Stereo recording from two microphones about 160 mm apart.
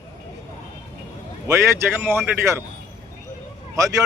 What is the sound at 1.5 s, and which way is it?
Speech, 20° right (ahead or behind).